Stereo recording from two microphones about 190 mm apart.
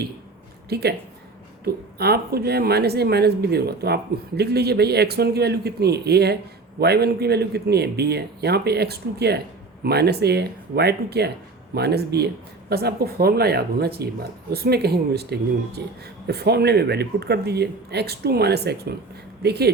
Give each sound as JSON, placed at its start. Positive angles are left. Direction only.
{"t": 0.7, "sound": "speech", "side_deg": -60}